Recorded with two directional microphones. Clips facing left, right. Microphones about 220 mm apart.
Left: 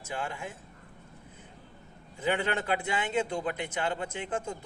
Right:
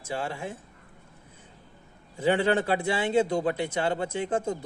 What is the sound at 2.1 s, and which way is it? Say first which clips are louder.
A man's voice: right 6 dB; 30° right (ahead or behind).